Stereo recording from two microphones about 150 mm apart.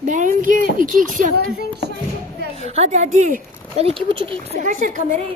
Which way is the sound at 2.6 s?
45° right (ahead or behind).